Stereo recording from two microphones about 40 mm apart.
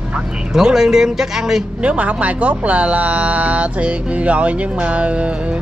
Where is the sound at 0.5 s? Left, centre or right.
Centre.